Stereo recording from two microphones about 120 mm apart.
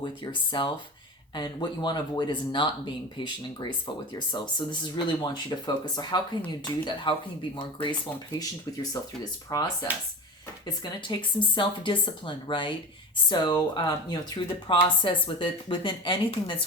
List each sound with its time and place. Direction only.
0.0 s speech: 40° left (ahead or behind)
11.0 s speech: 40° left (ahead or behind)